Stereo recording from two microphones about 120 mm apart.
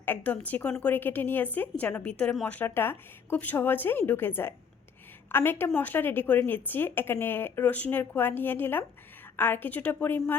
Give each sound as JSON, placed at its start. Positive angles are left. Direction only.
{"t": 0.0, "sound": "a woman's voice", "side_deg": 15}